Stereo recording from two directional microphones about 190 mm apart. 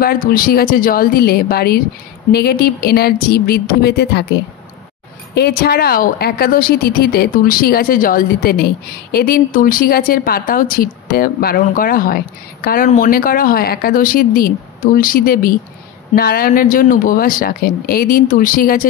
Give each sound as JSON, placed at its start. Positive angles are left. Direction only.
{"t": 0.0, "sound": "a woman's voice", "side_deg": 50}